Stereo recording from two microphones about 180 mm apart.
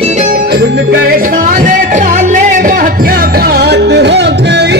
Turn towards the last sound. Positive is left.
turn(degrees=-75)  # may be behind; listen again after turning